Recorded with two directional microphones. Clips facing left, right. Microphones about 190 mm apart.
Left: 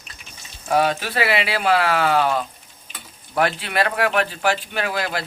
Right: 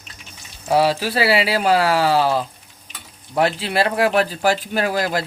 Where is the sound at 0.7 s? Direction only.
30° right (ahead or behind).